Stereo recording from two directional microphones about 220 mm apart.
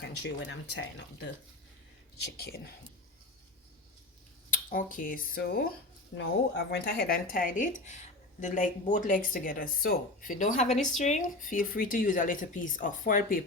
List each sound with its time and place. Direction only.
0.0 s speech: 50° left (ahead or behind)
2.1 s speech: 45° left (ahead or behind)
4.5 s speech: 35° left (ahead or behind)
6.1 s speech: 50° left (ahead or behind)